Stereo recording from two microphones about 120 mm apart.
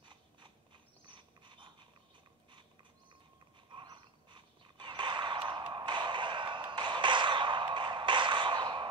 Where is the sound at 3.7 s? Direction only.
40° right (ahead or behind).